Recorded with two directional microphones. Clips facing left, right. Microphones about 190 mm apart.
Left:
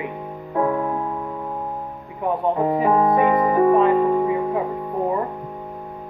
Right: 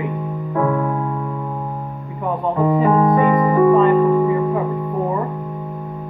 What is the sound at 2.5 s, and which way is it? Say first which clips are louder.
Music: right 5 dB; 20° left (ahead or behind).